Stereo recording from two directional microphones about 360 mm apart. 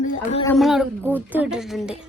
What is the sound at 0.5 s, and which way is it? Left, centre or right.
Speech, centre.